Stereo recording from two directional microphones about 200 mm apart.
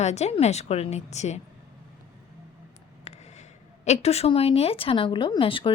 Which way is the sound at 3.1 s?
35° left (ahead or behind).